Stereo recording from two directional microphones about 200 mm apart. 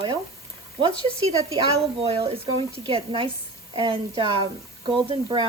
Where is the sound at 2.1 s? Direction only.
30° right (ahead or behind).